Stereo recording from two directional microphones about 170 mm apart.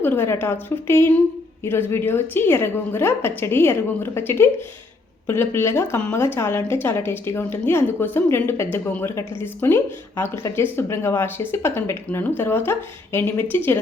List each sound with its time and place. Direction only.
0.0 s a woman's voice: 15° left (ahead or behind)